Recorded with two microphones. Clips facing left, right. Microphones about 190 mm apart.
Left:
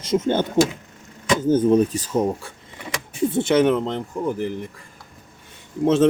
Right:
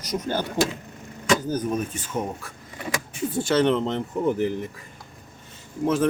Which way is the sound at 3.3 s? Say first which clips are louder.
Left 3 dB; 20° left (ahead or behind).